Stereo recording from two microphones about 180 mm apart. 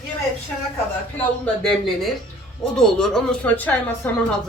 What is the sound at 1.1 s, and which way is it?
Speech, 5° left (ahead or behind).